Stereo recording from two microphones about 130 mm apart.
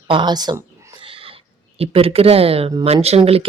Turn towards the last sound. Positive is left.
turn(degrees=-50)  # may be behind; listen again after turning